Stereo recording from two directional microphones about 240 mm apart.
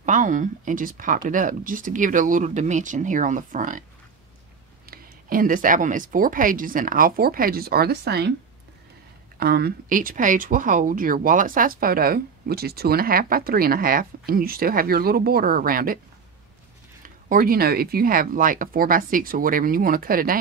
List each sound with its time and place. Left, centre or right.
0.0 s speech: right
4.8 s speech: right
9.4 s speech: right
17.0 s speech: right